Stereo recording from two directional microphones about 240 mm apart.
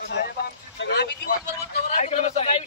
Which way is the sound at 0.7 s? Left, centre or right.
Left.